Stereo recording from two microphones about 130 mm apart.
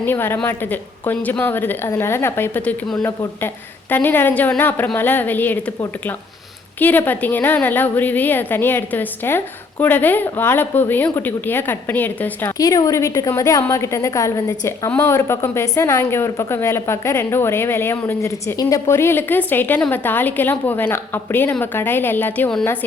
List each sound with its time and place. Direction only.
0.0 s a woman's voice: 15° left (ahead or behind)
12.5 s a woman's voice: 25° left (ahead or behind)